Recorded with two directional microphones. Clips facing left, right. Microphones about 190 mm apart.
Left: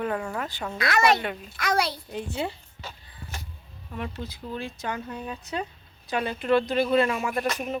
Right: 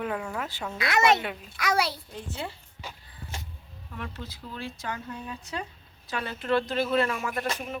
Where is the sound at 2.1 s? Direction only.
15° left (ahead or behind).